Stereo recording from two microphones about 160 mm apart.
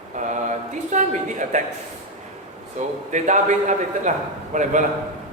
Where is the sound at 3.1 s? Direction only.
50° right (ahead or behind).